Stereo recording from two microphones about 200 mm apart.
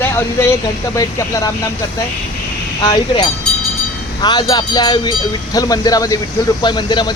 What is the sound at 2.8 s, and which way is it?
Speech, 20° left (ahead or behind).